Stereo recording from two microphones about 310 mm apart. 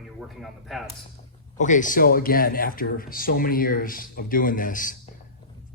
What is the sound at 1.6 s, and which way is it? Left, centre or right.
Speech, left.